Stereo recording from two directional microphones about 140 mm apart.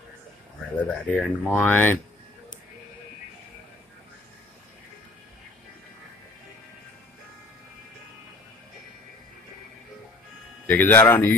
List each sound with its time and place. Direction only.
0.8 s speech: 5° left (ahead or behind)
10.7 s speech: 15° left (ahead or behind)